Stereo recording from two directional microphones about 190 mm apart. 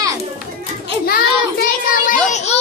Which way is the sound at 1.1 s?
50° left (ahead or behind).